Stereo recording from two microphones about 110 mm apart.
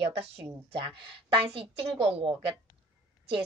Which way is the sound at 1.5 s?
60° right (ahead or behind).